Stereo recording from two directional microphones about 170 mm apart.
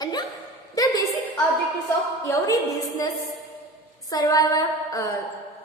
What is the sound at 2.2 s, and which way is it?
A woman's voice, 20° left (ahead or behind).